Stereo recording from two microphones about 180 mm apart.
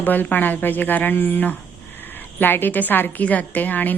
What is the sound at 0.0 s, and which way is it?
A woman's voice, 10° left (ahead or behind).